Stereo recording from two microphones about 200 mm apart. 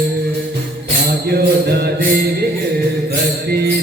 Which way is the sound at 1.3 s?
50° right (ahead or behind).